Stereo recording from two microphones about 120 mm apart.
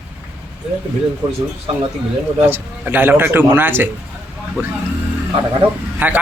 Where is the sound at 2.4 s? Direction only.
15° right (ahead or behind).